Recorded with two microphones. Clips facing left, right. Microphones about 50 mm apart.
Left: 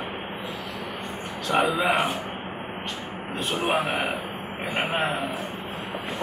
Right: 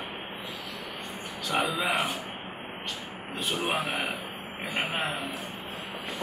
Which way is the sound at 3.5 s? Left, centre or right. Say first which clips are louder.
Left 5 dB; centre.